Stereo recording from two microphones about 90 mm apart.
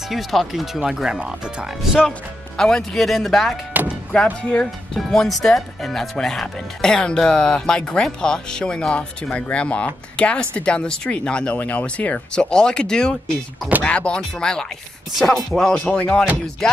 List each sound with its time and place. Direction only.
0.1 s speech: centre (ahead or behind)
2.0 s speech: 5° left (ahead or behind)
3.8 s music: 20° right (ahead or behind)
4.1 s speech: 10° left (ahead or behind)